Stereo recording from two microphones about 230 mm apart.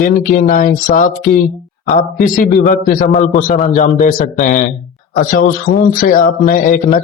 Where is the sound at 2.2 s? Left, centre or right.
Left.